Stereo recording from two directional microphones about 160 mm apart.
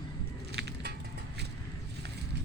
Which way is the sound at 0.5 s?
90° right.